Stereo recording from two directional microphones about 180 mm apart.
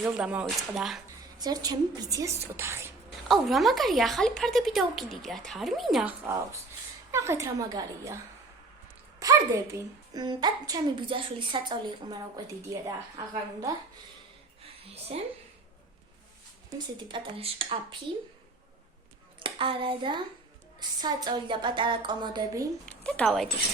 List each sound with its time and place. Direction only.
0.0 s speech: 5° right (ahead or behind)
1.4 s speech: 20° right (ahead or behind)
3.2 s speech: centre (ahead or behind)
7.1 s a woman's voice: 15° right (ahead or behind)
9.2 s a sound: 20° right (ahead or behind)
9.7 s speech: 25° right (ahead or behind)
14.9 s a woman's voice: 35° right (ahead or behind)
16.7 s speech: 30° right (ahead or behind)
19.4 s a child's voice: 30° right (ahead or behind)
22.9 s speech: 5° left (ahead or behind)